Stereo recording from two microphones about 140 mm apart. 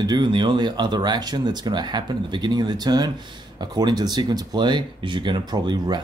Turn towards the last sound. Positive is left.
turn(degrees=-30)  # may be behind; listen again after turning